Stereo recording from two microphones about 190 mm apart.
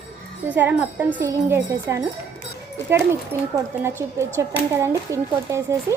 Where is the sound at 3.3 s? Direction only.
10° right (ahead or behind).